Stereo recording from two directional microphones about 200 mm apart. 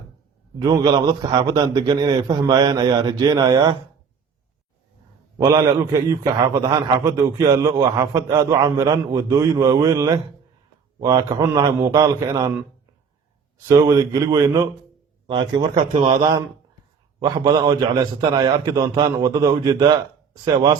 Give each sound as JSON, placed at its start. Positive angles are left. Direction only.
{"t": 0.6, "sound": "a man's voice", "side_deg": -20}
{"t": 5.4, "sound": "a man's voice", "side_deg": -15}
{"t": 13.7, "sound": "a man's voice", "side_deg": -20}
{"t": 17.2, "sound": "a man's voice", "side_deg": -20}